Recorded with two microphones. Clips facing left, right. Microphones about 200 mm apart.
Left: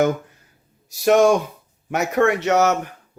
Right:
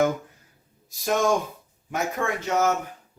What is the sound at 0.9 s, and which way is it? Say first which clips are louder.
Speech: left 8 dB; 75° left (ahead or behind).